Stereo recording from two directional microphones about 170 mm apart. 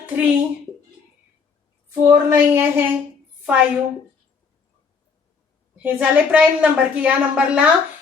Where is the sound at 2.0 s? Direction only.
15° right (ahead or behind).